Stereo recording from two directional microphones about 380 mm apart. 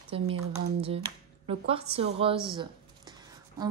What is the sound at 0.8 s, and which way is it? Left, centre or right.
A woman's voice, centre.